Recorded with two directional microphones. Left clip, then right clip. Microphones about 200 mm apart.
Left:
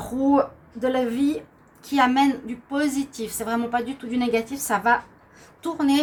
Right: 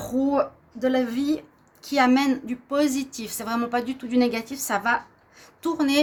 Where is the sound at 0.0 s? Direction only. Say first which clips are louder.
Left 2 dB; 60° right (ahead or behind).